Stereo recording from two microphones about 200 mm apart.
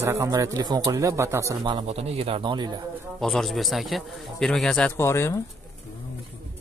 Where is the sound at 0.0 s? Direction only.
15° right (ahead or behind).